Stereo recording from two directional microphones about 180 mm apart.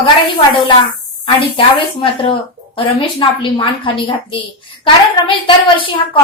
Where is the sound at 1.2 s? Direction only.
30° left (ahead or behind).